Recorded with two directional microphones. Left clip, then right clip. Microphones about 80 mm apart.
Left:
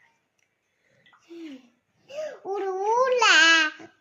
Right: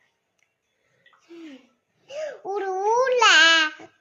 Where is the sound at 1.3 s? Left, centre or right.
Right.